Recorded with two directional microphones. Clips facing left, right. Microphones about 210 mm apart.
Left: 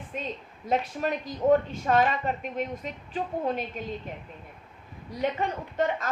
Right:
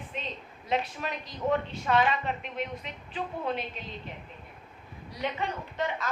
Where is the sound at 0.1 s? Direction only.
45° left (ahead or behind).